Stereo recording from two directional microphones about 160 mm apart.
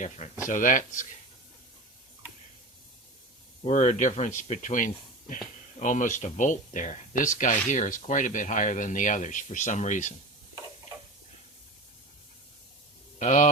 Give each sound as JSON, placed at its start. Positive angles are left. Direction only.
{"t": 0.4, "sound": "speech", "side_deg": 55}
{"t": 3.6, "sound": "speech", "side_deg": 45}
{"t": 13.1, "sound": "speech", "side_deg": 50}